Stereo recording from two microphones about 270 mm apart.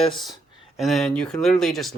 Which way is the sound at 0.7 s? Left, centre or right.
Centre.